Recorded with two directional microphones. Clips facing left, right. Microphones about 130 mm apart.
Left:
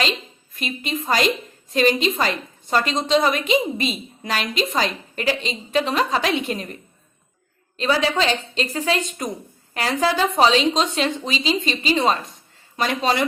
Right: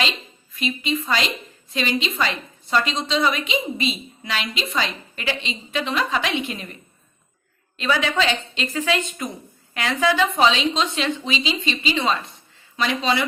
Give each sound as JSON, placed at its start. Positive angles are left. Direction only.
{"t": 0.5, "sound": "a woman's voice", "side_deg": 45}
{"t": 7.8, "sound": "a woman's voice", "side_deg": 35}